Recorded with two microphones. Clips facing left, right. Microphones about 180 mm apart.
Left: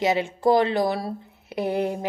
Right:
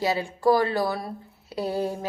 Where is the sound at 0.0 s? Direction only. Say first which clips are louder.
Left 2 dB; 20° left (ahead or behind).